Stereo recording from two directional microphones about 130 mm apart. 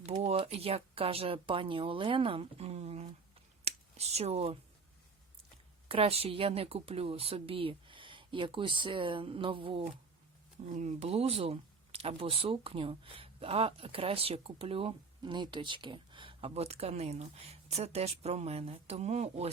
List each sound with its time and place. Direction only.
0.2 s speech: 50° right (ahead or behind)
3.6 s a sound: 55° right (ahead or behind)
5.9 s speech: 50° right (ahead or behind)
10.7 s speech: 65° right (ahead or behind)